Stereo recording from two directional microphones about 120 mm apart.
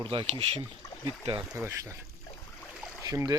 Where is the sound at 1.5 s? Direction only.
25° right (ahead or behind).